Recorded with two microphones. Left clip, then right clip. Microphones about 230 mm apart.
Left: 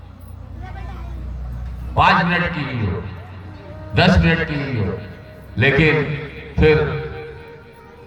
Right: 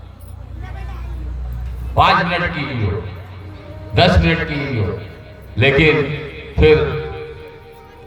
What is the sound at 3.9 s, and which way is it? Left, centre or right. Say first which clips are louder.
Speech: right 2 dB; right.